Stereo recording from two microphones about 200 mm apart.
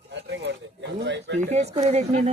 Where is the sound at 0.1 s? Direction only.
60° right (ahead or behind).